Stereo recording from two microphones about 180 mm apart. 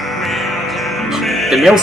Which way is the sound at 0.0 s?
Centre (ahead or behind).